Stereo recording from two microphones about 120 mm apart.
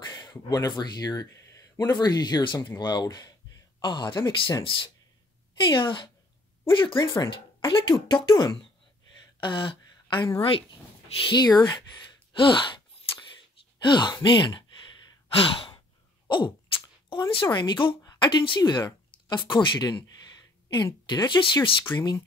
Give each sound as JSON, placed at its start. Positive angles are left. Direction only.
{"t": 0.0, "sound": "speech", "side_deg": 40}
{"t": 5.7, "sound": "speech", "side_deg": 45}
{"t": 13.8, "sound": "sigh", "side_deg": 40}
{"t": 16.3, "sound": "speech", "side_deg": 40}